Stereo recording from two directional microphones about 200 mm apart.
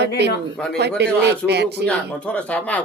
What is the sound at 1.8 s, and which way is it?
Speech, 5° left (ahead or behind).